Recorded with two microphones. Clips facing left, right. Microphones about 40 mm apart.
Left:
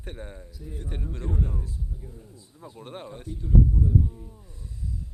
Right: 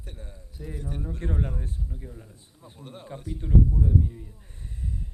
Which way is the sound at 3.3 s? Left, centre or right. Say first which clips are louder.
Even; right.